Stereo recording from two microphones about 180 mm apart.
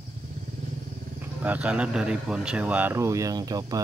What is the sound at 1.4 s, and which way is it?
A man's voice, 10° right (ahead or behind).